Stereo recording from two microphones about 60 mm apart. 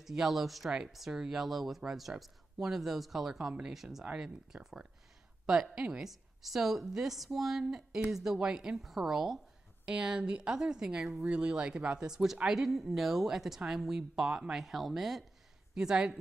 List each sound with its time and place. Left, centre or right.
0.0 s a woman's voice: centre
9.8 s a woman's voice: centre
12.4 s a woman's voice: centre